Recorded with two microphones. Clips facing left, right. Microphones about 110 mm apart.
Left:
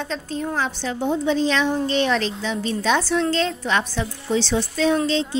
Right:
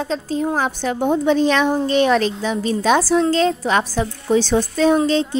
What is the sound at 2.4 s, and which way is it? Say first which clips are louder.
A woman's voice: right 4 dB; 40° right (ahead or behind).